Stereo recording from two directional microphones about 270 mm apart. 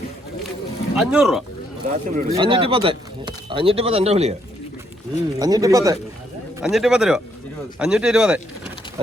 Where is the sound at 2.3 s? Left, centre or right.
Centre.